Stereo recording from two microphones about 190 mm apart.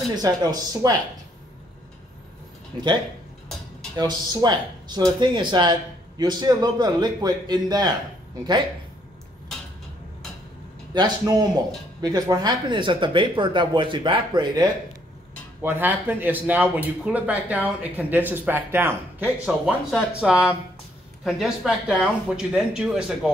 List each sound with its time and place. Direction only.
0.1 s speech: 20° right (ahead or behind)
2.7 s speech: 25° right (ahead or behind)
3.9 s speech: 20° right (ahead or behind)
10.9 s speech: 20° right (ahead or behind)
15.6 s speech: 10° right (ahead or behind)